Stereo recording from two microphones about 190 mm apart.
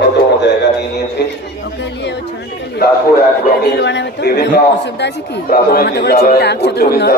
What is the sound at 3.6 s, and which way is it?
A man's voice, 65° left (ahead or behind).